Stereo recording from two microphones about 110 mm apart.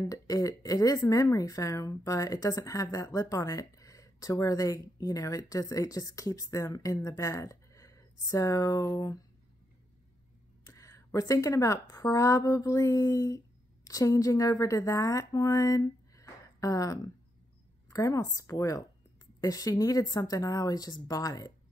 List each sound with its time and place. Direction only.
0.1 s speech: 30° left (ahead or behind)
10.6 s a sound: 30° left (ahead or behind)
11.1 s speech: 30° left (ahead or behind)